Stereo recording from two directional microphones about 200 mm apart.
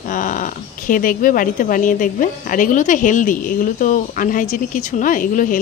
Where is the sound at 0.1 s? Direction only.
40° left (ahead or behind).